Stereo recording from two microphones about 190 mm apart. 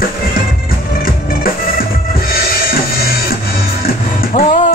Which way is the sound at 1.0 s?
50° left (ahead or behind).